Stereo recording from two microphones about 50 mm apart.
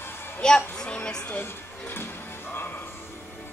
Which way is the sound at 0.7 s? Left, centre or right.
Centre.